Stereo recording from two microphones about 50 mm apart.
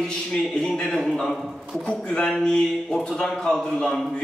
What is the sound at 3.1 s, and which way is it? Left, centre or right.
Speech, centre.